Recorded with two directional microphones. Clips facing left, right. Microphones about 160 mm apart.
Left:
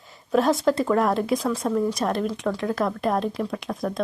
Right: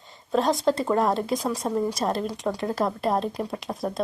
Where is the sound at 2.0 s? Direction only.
30° right (ahead or behind).